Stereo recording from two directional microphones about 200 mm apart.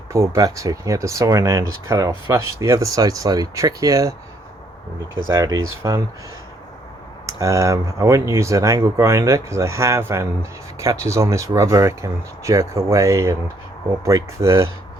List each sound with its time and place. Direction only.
0.1 s speech: 15° right (ahead or behind)
5.3 s speech: 20° right (ahead or behind)
7.3 s speech: 15° right (ahead or behind)